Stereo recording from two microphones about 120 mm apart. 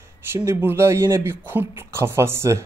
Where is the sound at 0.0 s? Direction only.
20° right (ahead or behind).